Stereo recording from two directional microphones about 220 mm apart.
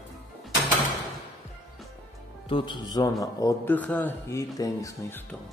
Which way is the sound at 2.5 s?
20° left (ahead or behind).